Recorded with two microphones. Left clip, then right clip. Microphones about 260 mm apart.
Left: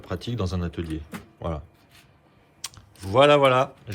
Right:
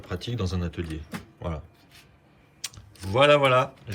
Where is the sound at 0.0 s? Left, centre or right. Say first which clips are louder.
Left 2 dB; centre.